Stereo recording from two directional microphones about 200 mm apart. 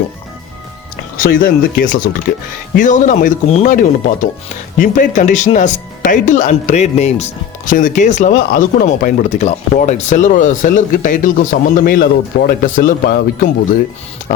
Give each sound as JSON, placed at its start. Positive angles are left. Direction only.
{"t": 1.1, "sound": "speech", "side_deg": 45}